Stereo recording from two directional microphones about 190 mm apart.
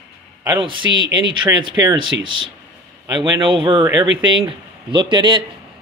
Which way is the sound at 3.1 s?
25° right (ahead or behind).